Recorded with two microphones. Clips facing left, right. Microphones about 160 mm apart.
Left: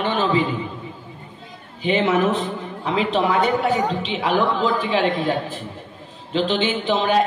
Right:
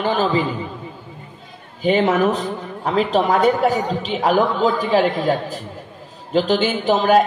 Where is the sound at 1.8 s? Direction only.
40° right (ahead or behind).